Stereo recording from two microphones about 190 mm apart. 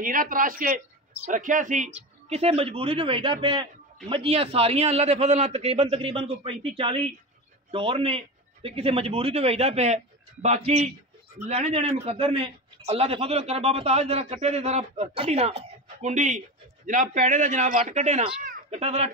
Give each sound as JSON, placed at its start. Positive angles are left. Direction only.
{"t": 0.0, "sound": "a man's voice", "side_deg": -45}
{"t": 18.4, "sound": "a sound", "side_deg": -45}
{"t": 18.8, "sound": "a man's voice", "side_deg": -35}